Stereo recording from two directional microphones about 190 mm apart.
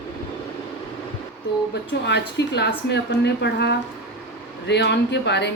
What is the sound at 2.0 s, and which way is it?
Speech, 65° left (ahead or behind).